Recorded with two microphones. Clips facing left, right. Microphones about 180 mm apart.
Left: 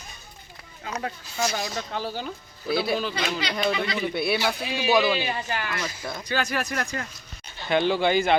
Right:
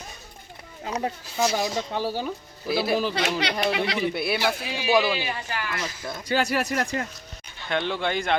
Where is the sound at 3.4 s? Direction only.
65° right (ahead or behind).